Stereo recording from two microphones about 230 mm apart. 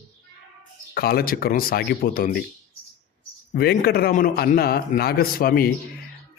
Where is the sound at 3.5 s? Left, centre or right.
Left.